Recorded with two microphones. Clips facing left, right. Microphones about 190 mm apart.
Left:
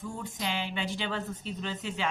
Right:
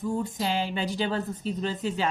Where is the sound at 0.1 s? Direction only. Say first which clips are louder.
Right 7 dB; 35° right (ahead or behind).